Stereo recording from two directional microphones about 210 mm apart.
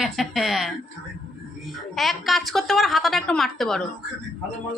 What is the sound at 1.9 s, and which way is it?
A woman's voice, centre (ahead or behind).